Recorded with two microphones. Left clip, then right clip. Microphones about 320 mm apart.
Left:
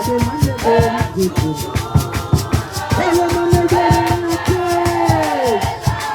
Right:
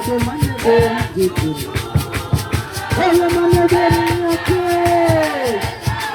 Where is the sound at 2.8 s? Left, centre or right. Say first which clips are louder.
Right 1 dB; left.